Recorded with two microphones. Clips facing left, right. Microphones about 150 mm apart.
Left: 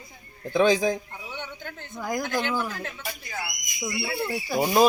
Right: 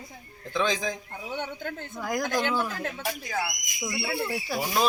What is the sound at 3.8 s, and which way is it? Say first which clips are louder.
Speech: left 1 dB; centre (ahead or behind).